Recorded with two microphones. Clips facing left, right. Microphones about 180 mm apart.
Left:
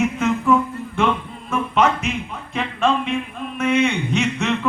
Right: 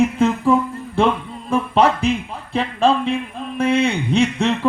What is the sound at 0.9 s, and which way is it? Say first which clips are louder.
Music: right 3 dB; 30° right (ahead or behind).